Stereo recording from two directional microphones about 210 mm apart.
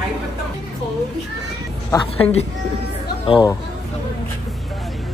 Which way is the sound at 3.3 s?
20° left (ahead or behind).